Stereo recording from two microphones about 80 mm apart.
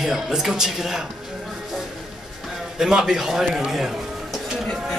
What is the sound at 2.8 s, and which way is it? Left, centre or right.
Speech, centre.